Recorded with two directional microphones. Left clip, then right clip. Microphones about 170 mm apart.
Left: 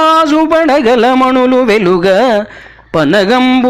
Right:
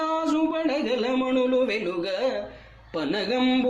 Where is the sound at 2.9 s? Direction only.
45° left (ahead or behind).